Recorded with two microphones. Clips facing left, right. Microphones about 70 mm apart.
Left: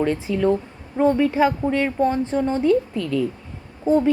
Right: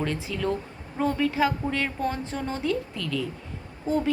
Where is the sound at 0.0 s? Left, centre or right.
Centre.